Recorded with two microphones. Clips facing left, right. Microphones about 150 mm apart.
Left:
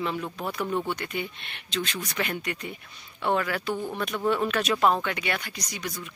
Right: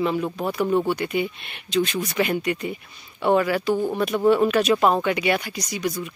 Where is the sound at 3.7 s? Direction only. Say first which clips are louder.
Right 8 dB; 30° right (ahead or behind).